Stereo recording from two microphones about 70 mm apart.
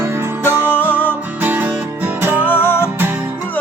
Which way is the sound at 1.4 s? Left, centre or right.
Right.